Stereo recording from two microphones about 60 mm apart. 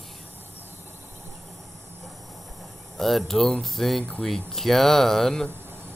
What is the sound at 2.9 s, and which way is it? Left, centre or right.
Speech, centre.